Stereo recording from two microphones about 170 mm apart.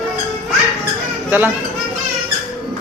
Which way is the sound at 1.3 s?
10° right (ahead or behind).